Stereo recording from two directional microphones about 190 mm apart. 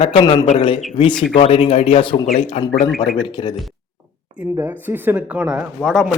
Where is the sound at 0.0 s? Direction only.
30° left (ahead or behind).